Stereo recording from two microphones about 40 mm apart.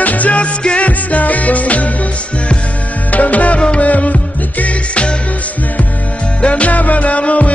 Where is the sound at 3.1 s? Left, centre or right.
Left.